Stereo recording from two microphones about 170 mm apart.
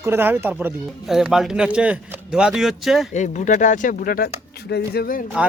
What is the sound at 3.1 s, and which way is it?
Speech, 45° left (ahead or behind).